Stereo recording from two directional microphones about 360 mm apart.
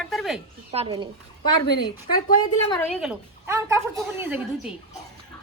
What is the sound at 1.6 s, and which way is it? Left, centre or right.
Speech, left.